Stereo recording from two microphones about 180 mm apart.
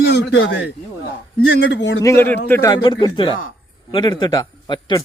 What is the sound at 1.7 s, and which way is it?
Speech, 85° left.